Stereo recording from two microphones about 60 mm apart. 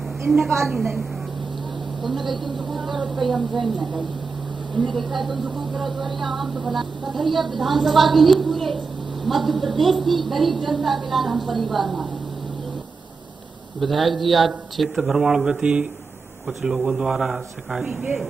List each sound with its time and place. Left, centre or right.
0.3 s a woman's voice: centre
4.9 s speech: centre
13.7 s speech: centre
15.6 s speech: centre